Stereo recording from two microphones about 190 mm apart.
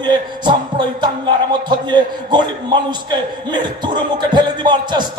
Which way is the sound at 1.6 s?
25° right (ahead or behind).